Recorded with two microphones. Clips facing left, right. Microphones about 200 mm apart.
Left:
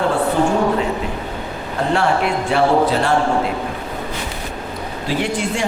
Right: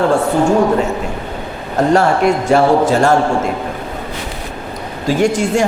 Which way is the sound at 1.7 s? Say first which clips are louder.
Right 5 dB; 40° right (ahead or behind).